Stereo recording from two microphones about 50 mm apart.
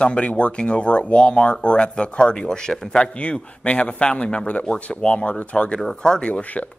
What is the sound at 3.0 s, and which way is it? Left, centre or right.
Speech, left.